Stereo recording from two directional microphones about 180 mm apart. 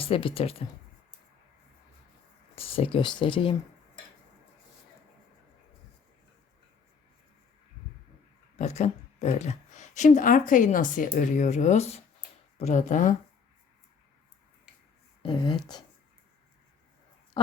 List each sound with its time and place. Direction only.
0.0 s speech: 30° left (ahead or behind)
2.6 s speech: 30° left (ahead or behind)
8.5 s speech: 40° left (ahead or behind)
15.2 s speech: 25° left (ahead or behind)
17.4 s a sound: 30° left (ahead or behind)